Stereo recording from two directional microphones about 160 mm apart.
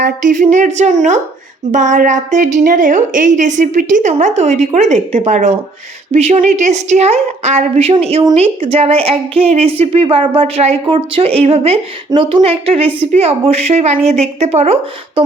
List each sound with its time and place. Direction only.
0.0 s a woman's voice: 55° right (ahead or behind)